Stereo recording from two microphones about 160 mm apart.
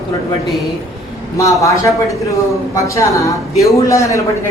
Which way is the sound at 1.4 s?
20° left (ahead or behind).